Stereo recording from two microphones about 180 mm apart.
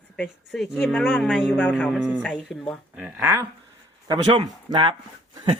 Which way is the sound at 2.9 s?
10° right (ahead or behind).